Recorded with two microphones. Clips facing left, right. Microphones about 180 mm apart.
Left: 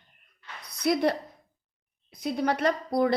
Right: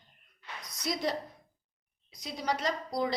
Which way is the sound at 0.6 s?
60° left (ahead or behind).